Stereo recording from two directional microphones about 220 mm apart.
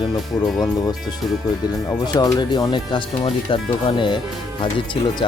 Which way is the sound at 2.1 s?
20° left (ahead or behind).